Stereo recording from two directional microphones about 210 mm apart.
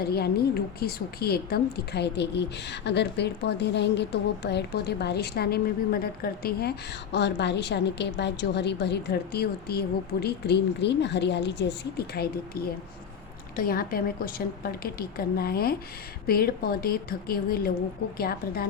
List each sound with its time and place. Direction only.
0.0 s a woman's voice: 50° left (ahead or behind)